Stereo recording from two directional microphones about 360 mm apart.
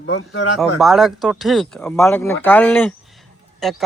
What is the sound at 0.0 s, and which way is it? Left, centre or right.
Speech, left.